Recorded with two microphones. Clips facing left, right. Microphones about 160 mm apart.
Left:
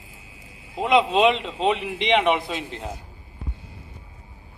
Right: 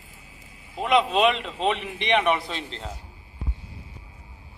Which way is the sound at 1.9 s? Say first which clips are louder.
Left 1 dB; 15° left (ahead or behind).